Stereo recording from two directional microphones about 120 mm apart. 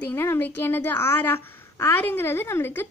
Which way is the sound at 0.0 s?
20° left (ahead or behind).